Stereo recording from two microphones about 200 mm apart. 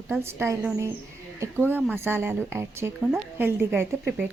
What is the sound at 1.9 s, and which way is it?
A woman's voice, 10° right (ahead or behind).